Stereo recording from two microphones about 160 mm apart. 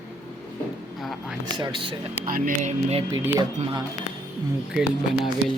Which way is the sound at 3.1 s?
15° right (ahead or behind).